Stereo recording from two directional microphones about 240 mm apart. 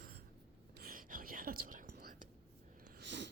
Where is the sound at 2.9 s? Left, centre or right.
Right.